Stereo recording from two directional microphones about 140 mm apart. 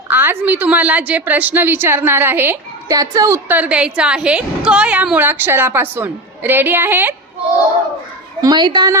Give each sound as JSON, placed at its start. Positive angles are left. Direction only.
{"t": 0.1, "sound": "a woman's voice", "side_deg": -15}
{"t": 8.4, "sound": "a woman's voice", "side_deg": -30}